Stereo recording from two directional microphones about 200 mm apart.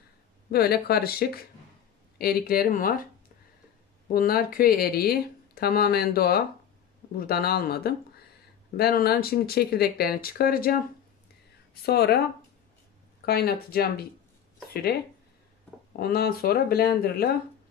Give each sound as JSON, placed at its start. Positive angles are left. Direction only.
{"t": 0.5, "sound": "speech", "side_deg": 50}
{"t": 4.1, "sound": "speech", "side_deg": 50}
{"t": 11.8, "sound": "speech", "side_deg": 55}
{"t": 13.2, "sound": "speech", "side_deg": 50}
{"t": 16.0, "sound": "speech", "side_deg": 50}